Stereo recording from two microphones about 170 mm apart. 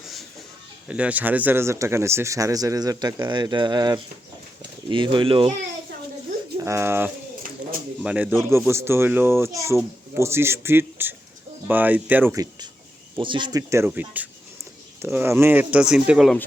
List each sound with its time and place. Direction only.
0.9 s speech: 5° right (ahead or behind); by 5.5 s 30° right (ahead or behind)
6.6 s a child's voice: 15° right (ahead or behind)